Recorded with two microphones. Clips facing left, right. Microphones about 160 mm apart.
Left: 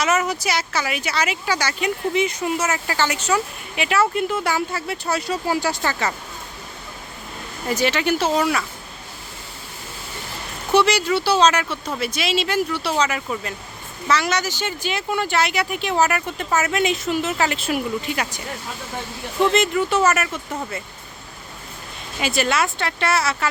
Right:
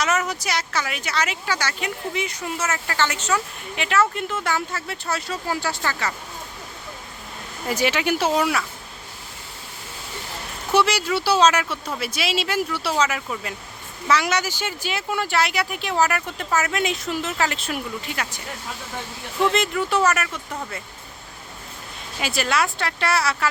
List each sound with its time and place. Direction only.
0.0 s speech: 5° left (ahead or behind); by 6.1 s 20° left (ahead or behind)
7.7 s speech: 10° right (ahead or behind)
10.7 s speech: 5° right (ahead or behind); by 18.3 s 15° left (ahead or behind)
19.4 s speech: centre (ahead or behind)
22.2 s speech: centre (ahead or behind)